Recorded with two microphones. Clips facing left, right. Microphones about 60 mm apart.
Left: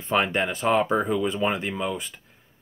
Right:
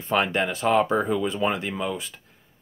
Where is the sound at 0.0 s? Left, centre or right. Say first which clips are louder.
Even; centre.